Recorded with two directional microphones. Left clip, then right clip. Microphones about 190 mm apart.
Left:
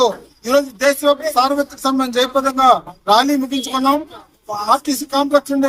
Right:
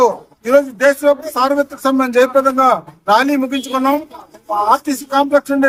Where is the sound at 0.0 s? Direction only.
10° right (ahead or behind).